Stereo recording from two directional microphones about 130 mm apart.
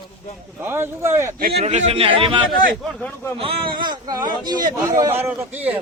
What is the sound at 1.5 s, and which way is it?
Speech, 55° right (ahead or behind).